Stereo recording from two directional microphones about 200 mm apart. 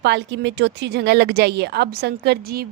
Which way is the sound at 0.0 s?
60° right (ahead or behind).